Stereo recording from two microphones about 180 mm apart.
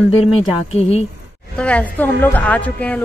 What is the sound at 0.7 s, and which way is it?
Speech, 35° left (ahead or behind).